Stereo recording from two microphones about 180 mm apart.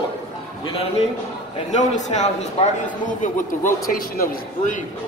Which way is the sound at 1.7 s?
40° left (ahead or behind).